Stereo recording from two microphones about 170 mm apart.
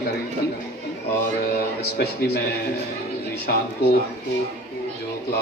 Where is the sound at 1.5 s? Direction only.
65° left (ahead or behind).